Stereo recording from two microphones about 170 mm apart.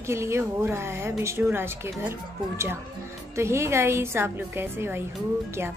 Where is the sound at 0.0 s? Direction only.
15° right (ahead or behind).